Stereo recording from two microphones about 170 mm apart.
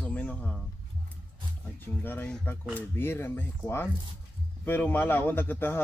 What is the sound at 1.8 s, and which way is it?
A man's voice, 10° left (ahead or behind).